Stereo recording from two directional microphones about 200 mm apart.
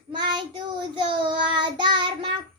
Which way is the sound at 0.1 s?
20° right (ahead or behind).